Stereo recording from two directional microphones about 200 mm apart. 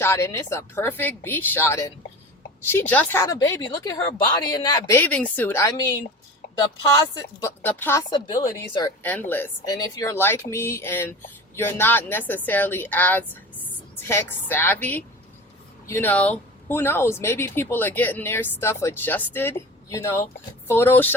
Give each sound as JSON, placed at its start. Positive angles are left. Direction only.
{"t": 0.0, "sound": "speech", "side_deg": 15}
{"t": 7.1, "sound": "a woman's voice", "side_deg": 20}
{"t": 9.0, "sound": "speech", "side_deg": 10}